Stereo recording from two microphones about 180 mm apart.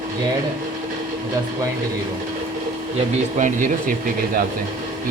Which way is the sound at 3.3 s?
45° right (ahead or behind).